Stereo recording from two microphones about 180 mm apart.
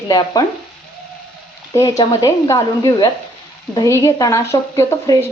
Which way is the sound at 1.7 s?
20° left (ahead or behind).